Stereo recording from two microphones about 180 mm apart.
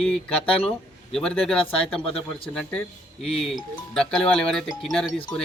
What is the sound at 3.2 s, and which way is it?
Speech, centre (ahead or behind).